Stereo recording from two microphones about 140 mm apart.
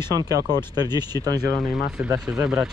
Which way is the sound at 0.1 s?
25° right (ahead or behind).